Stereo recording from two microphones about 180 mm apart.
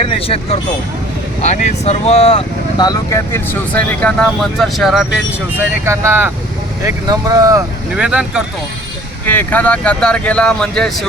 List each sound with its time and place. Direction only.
0.0 s speech: 30° left (ahead or behind); by 5.6 s centre (ahead or behind)
5.8 s speech: 15° right (ahead or behind)
7.9 s speech: 5° right (ahead or behind)
9.2 s speech: 10° left (ahead or behind)